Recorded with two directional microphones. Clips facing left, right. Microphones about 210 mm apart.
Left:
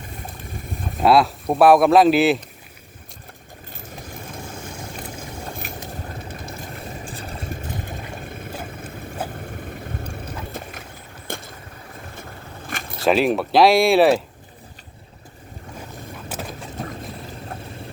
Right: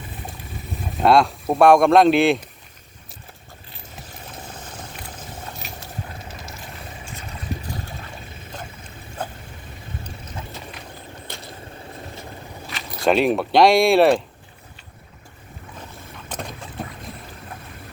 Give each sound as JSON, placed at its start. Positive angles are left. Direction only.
{"t": 1.0, "sound": "speech", "side_deg": 5}
{"t": 5.6, "sound": "boat", "side_deg": 55}
{"t": 6.2, "sound": "vehicle", "side_deg": 55}
{"t": 7.0, "sound": "vehicle", "side_deg": 35}
{"t": 8.5, "sound": "boat", "side_deg": 5}
{"t": 10.0, "sound": "vehicle", "side_deg": 55}
{"t": 12.6, "sound": "vehicle", "side_deg": 50}
{"t": 13.0, "sound": "speech", "side_deg": 0}
{"t": 16.3, "sound": "mechanisms", "side_deg": 5}
{"t": 16.8, "sound": "boat", "side_deg": 0}